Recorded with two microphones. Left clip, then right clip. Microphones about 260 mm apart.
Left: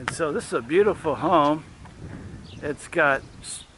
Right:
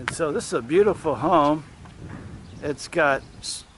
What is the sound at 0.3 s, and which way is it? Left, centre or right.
Speech, centre.